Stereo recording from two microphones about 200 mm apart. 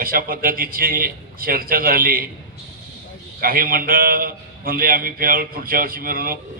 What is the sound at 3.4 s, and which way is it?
A man's voice, 45° right (ahead or behind).